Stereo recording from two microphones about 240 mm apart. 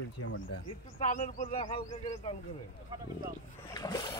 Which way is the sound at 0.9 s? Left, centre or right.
Left.